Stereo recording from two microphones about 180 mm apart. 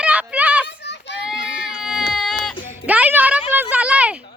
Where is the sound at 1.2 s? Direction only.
Centre (ahead or behind).